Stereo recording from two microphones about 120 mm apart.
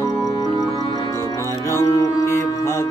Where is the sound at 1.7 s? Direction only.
20° left (ahead or behind).